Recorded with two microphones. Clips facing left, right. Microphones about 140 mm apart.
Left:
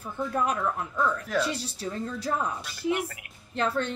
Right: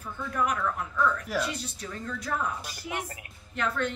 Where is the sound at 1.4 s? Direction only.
30° left (ahead or behind).